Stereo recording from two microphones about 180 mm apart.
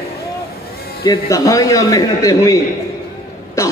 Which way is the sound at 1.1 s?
20° left (ahead or behind).